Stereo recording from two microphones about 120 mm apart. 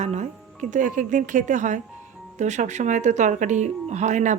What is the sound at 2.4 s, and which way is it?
Speech, 80° right.